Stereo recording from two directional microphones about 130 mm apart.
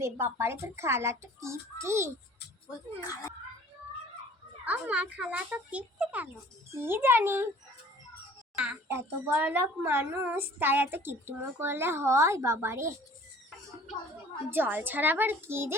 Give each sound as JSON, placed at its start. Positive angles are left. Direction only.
{"t": 0.0, "sound": "a child's voice", "side_deg": -20}
{"t": 3.0, "sound": "speech", "side_deg": 30}
{"t": 4.6, "sound": "a woman's voice", "side_deg": -10}
{"t": 8.5, "sound": "a child's voice", "side_deg": -5}
{"t": 8.9, "sound": "a woman's voice", "side_deg": -20}
{"t": 14.5, "sound": "a woman's voice", "side_deg": -15}